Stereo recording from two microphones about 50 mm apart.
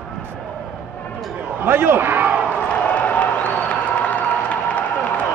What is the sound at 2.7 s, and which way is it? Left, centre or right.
Applause, left.